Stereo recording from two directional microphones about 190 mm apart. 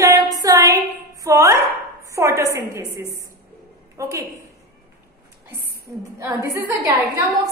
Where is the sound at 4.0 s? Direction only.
15° right (ahead or behind).